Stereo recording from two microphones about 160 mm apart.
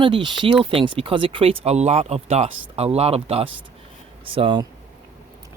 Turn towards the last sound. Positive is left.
turn(degrees=-30)  # may be behind; listen again after turning